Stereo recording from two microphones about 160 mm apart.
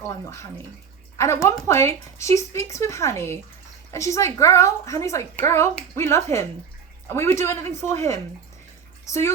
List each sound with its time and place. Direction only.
0.1 s a woman's voice: 20° left (ahead or behind)